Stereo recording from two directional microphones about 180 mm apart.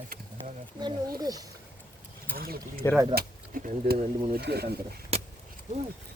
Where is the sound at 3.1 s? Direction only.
50° right (ahead or behind).